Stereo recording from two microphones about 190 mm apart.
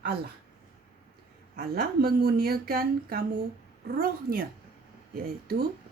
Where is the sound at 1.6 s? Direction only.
50° right (ahead or behind).